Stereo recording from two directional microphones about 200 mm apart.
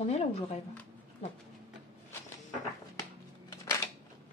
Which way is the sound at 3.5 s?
15° left (ahead or behind).